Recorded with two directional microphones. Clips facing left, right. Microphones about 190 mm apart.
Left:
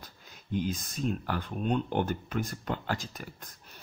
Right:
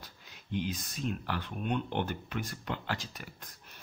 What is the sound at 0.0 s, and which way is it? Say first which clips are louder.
Speech: left 2 dB; 45° left (ahead or behind).